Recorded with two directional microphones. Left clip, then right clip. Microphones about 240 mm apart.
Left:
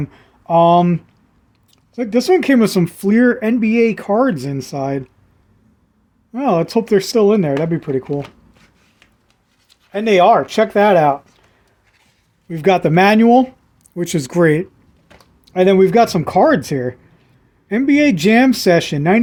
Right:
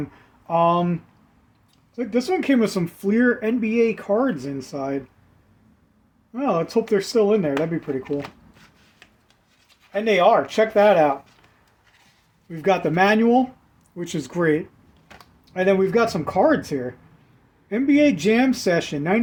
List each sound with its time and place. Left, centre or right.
0.1 s speech: left
6.3 s speech: left
9.9 s speech: left
12.5 s speech: left